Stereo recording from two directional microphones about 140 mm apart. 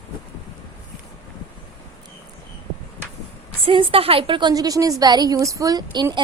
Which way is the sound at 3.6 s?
40° right (ahead or behind).